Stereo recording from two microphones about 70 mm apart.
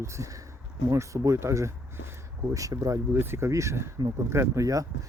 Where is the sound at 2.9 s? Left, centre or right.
Right.